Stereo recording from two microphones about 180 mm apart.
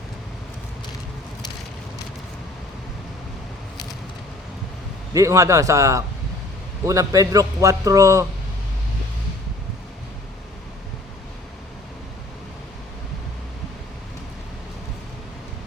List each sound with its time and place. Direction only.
5.1 s a man's voice: 20° right (ahead or behind)